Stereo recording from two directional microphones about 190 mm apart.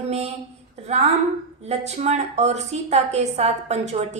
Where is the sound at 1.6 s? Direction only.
35° right (ahead or behind).